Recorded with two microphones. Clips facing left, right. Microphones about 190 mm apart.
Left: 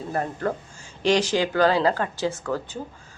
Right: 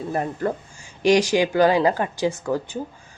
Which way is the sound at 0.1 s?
15° right (ahead or behind).